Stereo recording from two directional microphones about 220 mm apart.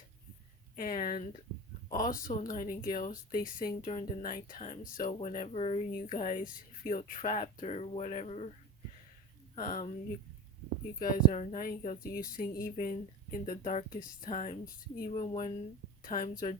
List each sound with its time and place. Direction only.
0.8 s speech: 35° left (ahead or behind)
9.6 s speech: 40° left (ahead or behind)
11.0 s speech: 35° left (ahead or behind)
15.3 s speech: 25° left (ahead or behind)
16.0 s speech: 40° left (ahead or behind)